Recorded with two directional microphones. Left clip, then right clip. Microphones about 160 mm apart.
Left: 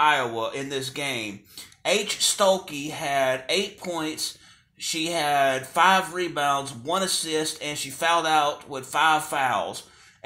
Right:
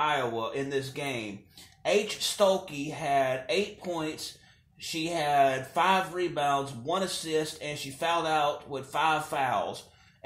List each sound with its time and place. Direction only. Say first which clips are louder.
0.0 s speech: left 7 dB; 20° left (ahead or behind)